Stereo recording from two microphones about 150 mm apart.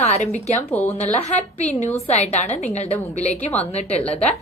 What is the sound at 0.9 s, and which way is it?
A woman's voice, 50° left (ahead or behind).